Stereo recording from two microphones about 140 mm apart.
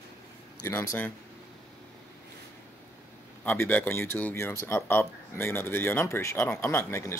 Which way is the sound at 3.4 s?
15° left (ahead or behind).